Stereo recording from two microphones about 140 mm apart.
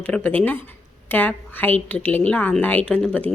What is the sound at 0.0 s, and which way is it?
A woman's voice, 10° left (ahead or behind).